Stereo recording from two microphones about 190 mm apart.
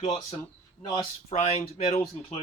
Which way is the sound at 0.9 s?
25° left (ahead or behind).